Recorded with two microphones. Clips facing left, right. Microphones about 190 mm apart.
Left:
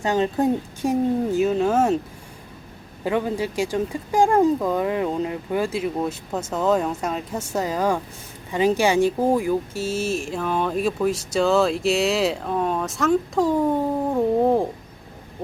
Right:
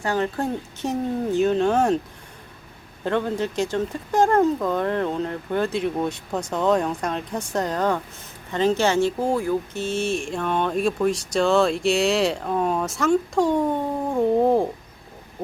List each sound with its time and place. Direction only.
0.0 s speech: 20° left (ahead or behind)
3.0 s speech: 10° left (ahead or behind)